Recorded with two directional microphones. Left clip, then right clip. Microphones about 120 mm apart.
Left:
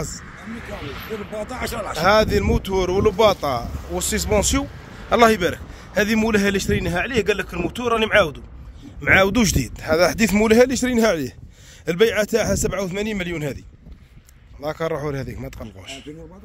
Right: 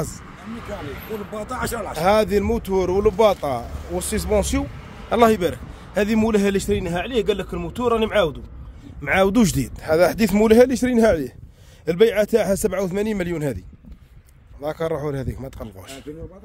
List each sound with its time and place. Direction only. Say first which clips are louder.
2.0 s speech: left 1 dB; 20° right (ahead or behind)
6.8 s speech: left 1 dB; 5° left (ahead or behind)
9.0 s speech: left 3 dB; 25° right (ahead or behind)
9.3 s a man's voice: even; 40° right (ahead or behind)
14.6 s speech: even; 25° right (ahead or behind)